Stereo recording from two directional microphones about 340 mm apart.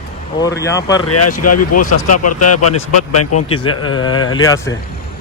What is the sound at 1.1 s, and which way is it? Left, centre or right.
Speech, left.